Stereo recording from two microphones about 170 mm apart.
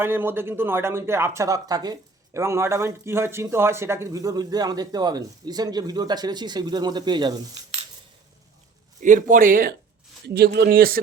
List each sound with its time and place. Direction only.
0.0 s speech: 10° right (ahead or behind)
9.0 s speech: 50° right (ahead or behind)
10.2 s speech: 70° right (ahead or behind)